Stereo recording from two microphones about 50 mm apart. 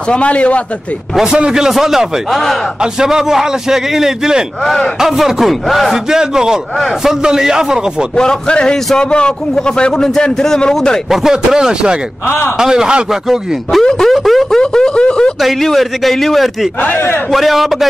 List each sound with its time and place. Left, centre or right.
0.1 s a man's voice: left
1.2 s a man's voice: centre
6.0 s a man's voice: centre
8.2 s a man's voice: centre
11.1 s a man's voice: centre
13.3 s a man's voice: centre
13.8 s a man's voice: centre
14.1 s a sound: centre
14.6 s a sound: centre
15.4 s a man's voice: centre